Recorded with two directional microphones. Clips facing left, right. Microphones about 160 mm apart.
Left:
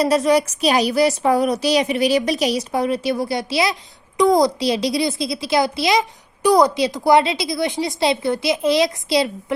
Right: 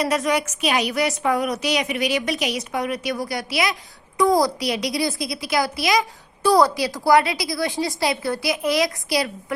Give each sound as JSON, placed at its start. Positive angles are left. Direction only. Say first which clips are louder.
{"t": 0.1, "sound": "a woman's voice", "louder": "left 6 dB", "side_deg": 30}